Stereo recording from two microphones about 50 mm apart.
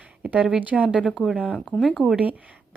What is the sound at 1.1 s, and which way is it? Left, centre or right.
Speech, centre.